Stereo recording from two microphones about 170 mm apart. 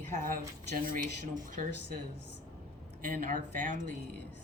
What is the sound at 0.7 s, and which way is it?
Speech, 55° right (ahead or behind).